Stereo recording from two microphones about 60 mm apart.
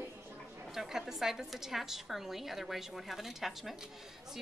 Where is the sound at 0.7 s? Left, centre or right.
Centre.